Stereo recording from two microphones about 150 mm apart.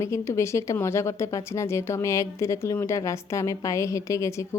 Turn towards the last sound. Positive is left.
turn(degrees=20)  # may be behind; listen again after turning